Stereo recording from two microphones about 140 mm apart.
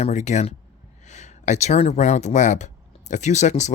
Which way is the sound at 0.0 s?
55° left (ahead or behind).